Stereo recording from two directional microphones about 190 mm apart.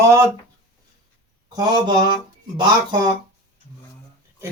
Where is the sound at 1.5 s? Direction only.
25° right (ahead or behind).